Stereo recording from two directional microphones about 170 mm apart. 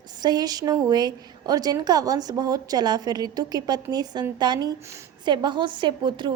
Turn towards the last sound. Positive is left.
turn(degrees=-30)  # may be behind; listen again after turning